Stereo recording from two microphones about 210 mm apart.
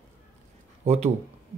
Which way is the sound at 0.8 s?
30° right (ahead or behind).